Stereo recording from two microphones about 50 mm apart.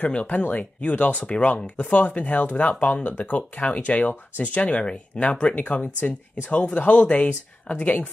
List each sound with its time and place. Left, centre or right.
0.0 s speech: left